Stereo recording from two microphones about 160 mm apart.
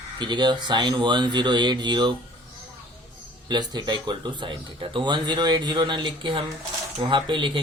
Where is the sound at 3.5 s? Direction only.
25° right (ahead or behind).